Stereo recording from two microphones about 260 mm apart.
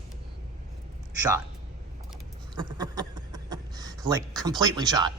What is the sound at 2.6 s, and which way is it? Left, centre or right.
Speech, centre.